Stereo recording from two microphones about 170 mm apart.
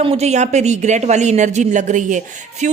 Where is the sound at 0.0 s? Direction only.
35° right (ahead or behind).